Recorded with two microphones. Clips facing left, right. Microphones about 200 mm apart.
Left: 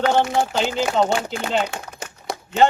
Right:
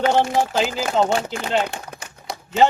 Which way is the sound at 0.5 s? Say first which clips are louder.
Even; 5° right (ahead or behind).